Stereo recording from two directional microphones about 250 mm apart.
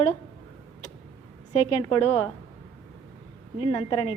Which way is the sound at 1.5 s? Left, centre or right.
Left.